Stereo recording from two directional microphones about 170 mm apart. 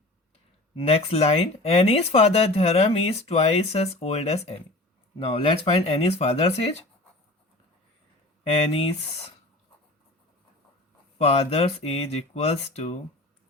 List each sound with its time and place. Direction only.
0.8 s speech: 35° left (ahead or behind)
8.4 s speech: 35° left (ahead or behind)
11.2 s speech: 35° left (ahead or behind)